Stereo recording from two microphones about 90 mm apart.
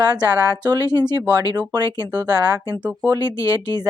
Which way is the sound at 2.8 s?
20° right (ahead or behind).